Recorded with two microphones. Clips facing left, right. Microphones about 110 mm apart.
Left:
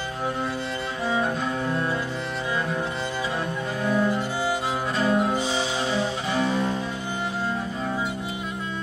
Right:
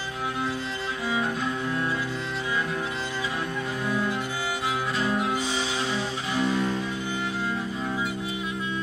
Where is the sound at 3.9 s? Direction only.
40° left (ahead or behind).